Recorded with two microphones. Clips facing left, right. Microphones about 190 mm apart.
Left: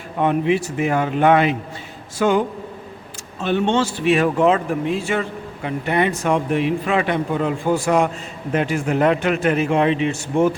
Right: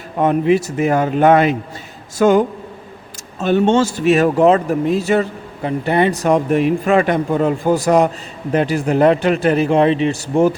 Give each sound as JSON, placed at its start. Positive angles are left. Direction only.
{"t": 0.2, "sound": "speech", "side_deg": -40}
{"t": 3.4, "sound": "speech", "side_deg": -40}